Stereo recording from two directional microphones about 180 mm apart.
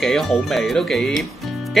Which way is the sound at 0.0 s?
Centre (ahead or behind).